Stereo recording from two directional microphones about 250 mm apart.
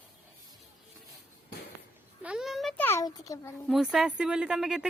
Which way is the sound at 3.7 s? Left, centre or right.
Centre.